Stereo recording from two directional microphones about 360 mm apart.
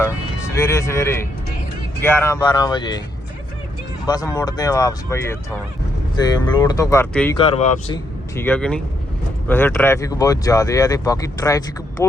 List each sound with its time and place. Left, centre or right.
0.0 s speech: centre
4.0 s speech: centre
7.3 s speech: centre
8.4 s speech: centre